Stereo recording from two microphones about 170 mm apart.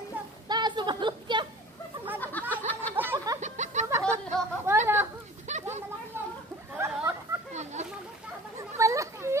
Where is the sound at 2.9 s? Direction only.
15° right (ahead or behind).